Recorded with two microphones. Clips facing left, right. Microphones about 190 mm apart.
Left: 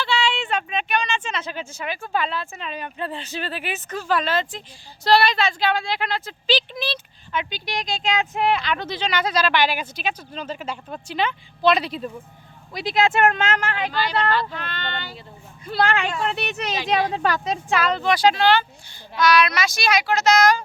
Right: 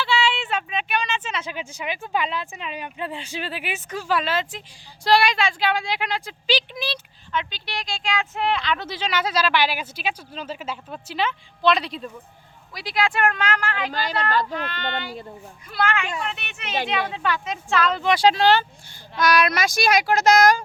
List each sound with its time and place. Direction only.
0.0 s a woman's voice: 5° right (ahead or behind)
7.3 s speech: 15° left (ahead or behind)
8.6 s speech: centre (ahead or behind)
12.7 s speech: 25° left (ahead or behind)
13.9 s speech: 45° right (ahead or behind)
14.5 s a woman's voice: 10° right (ahead or behind)
15.6 s speech: 30° left (ahead or behind)
18.0 s speech: 25° right (ahead or behind)
19.1 s speech: 50° right (ahead or behind)